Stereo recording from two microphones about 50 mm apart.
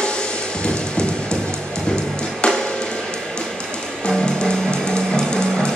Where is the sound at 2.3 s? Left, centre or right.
Centre.